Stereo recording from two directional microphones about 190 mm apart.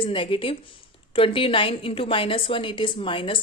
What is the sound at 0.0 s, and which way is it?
A woman's voice, 25° left (ahead or behind).